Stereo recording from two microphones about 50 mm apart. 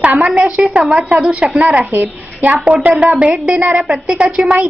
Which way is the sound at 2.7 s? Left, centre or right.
Right.